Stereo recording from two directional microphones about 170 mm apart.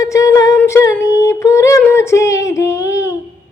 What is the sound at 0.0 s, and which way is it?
Humming, 20° left (ahead or behind).